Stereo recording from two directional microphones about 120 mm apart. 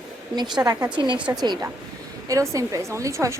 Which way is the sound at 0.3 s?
35° right (ahead or behind).